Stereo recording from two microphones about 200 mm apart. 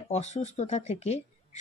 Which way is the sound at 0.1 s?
35° left (ahead or behind).